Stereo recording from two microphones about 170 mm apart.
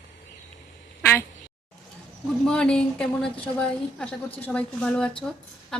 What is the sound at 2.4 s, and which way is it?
A woman's voice, 5° left (ahead or behind).